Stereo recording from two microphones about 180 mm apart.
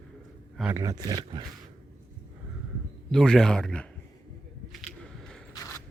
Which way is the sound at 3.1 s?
5° left (ahead or behind).